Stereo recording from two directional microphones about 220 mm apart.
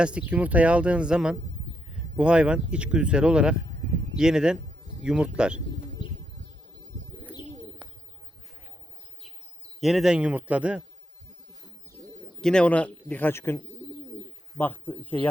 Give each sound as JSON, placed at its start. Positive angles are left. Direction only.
{"t": 0.0, "sound": "speech", "side_deg": -5}
{"t": 6.0, "sound": "bird", "side_deg": 20}
{"t": 9.8, "sound": "speech", "side_deg": 0}
{"t": 12.4, "sound": "a man's voice", "side_deg": 5}
{"t": 14.6, "sound": "a man's voice", "side_deg": 10}